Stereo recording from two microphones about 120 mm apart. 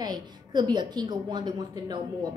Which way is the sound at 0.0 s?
35° right (ahead or behind).